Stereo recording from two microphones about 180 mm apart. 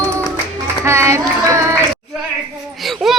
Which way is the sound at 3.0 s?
Centre (ahead or behind).